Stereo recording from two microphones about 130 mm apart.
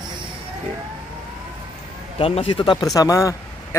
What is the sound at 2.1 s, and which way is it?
Speech, 45° left (ahead or behind).